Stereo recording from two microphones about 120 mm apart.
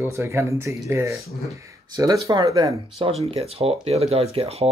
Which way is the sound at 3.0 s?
55° right (ahead or behind).